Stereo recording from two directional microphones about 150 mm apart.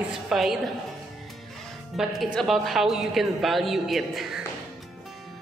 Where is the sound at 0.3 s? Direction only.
Centre (ahead or behind).